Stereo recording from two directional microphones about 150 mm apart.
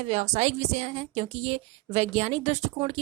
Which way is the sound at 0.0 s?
50° right (ahead or behind).